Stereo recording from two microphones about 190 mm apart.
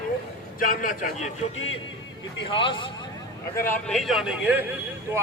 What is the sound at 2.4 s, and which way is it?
Speech, 25° left (ahead or behind).